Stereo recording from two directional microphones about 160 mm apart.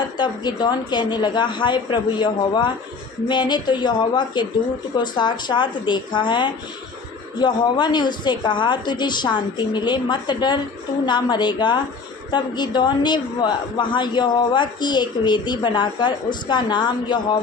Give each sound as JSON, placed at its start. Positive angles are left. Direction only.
{"t": 0.2, "sound": "a woman's voice", "side_deg": 25}